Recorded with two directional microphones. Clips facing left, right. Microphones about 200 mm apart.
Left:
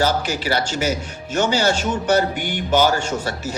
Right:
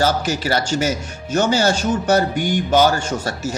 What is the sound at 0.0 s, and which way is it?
Speech, 40° right (ahead or behind).